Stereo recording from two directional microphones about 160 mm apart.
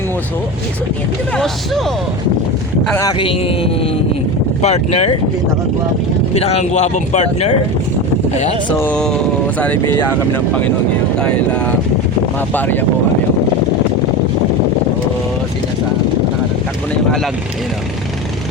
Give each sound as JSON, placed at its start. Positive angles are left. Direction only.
{"t": 2.9, "sound": "a man's voice", "side_deg": 20}
{"t": 6.3, "sound": "speech", "side_deg": 40}
{"t": 8.8, "sound": "speech", "side_deg": 5}
{"t": 11.2, "sound": "speech", "side_deg": 10}